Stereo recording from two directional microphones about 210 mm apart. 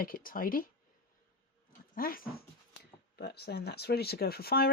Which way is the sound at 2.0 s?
45° left (ahead or behind).